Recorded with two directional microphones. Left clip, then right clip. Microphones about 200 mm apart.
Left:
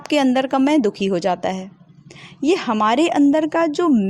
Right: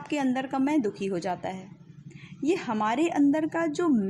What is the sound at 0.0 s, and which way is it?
A woman's voice, 40° left (ahead or behind).